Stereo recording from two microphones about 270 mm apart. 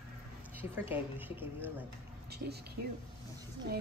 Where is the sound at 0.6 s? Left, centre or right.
Centre.